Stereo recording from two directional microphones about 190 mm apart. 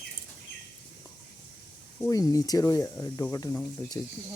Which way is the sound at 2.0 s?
15° left (ahead or behind).